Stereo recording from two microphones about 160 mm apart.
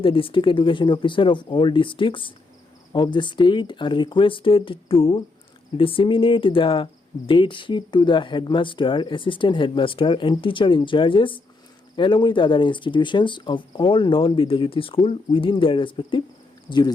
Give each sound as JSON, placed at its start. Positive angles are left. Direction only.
{"t": 0.0, "sound": "speech", "side_deg": 35}